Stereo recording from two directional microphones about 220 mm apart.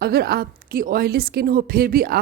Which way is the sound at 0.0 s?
45° right (ahead or behind).